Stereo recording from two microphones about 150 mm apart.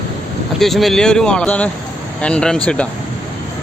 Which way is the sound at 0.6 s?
Centre (ahead or behind).